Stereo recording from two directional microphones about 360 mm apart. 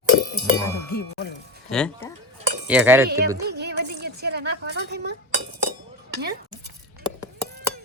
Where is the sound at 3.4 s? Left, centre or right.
Right.